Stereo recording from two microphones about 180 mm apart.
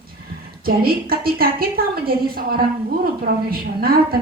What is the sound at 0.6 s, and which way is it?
A woman's voice, 55° right (ahead or behind).